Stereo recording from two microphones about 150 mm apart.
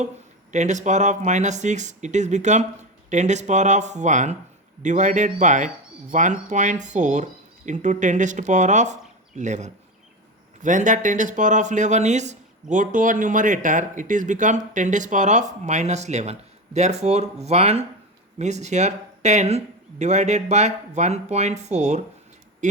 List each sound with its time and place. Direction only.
0.5 s speech: 50° right (ahead or behind)